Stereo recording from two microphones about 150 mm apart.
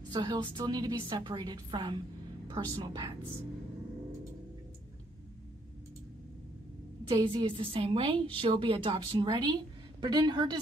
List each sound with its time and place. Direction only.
0.1 s a woman's voice: 30° right (ahead or behind)
7.2 s a woman's voice: 35° right (ahead or behind)